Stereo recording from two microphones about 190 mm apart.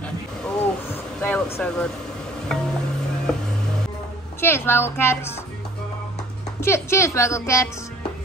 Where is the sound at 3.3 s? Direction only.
5° left (ahead or behind).